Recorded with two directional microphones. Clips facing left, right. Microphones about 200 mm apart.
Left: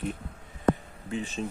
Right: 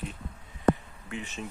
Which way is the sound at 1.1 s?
30° left (ahead or behind).